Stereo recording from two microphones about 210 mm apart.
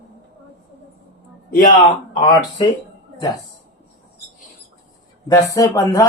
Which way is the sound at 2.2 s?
20° left (ahead or behind).